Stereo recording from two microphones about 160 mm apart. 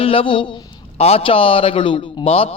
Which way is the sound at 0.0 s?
35° left (ahead or behind).